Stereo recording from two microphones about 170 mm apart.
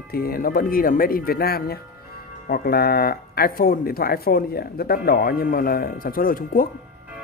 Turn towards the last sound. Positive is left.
turn(degrees=55)  # may be behind; listen again after turning